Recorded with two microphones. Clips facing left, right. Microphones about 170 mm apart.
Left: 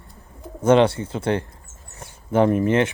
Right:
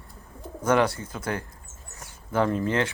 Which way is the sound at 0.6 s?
25° left (ahead or behind).